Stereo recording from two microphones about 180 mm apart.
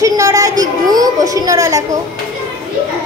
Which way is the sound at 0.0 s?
20° right (ahead or behind).